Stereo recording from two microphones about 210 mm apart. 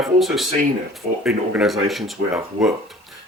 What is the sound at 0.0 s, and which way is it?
Speech, centre (ahead or behind).